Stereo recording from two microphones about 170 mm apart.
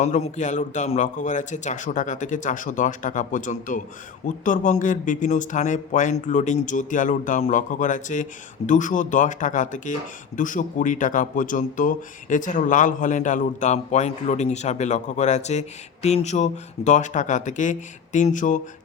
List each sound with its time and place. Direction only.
0.0 s speech: 45° left (ahead or behind)